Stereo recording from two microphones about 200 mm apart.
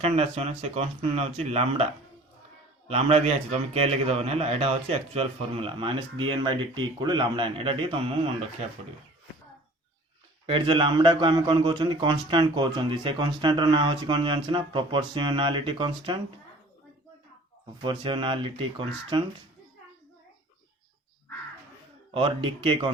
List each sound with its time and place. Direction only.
0.0 s a man's voice: 30° right (ahead or behind)
10.4 s a man's voice: 25° right (ahead or behind)
17.8 s a man's voice: 25° right (ahead or behind)
22.1 s a man's voice: 25° right (ahead or behind)